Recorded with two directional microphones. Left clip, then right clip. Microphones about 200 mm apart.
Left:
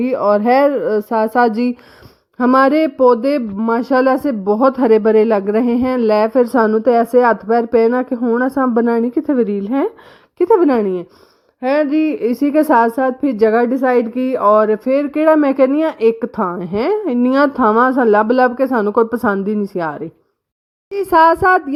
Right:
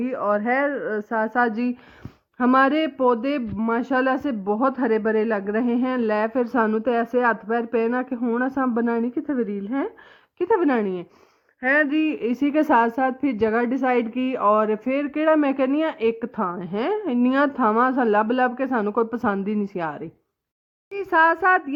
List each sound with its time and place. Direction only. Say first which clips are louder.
0.0 s a woman's voice: left 9 dB; 45° left (ahead or behind)
10.3 s a woman's voice: left 8 dB; 35° left (ahead or behind)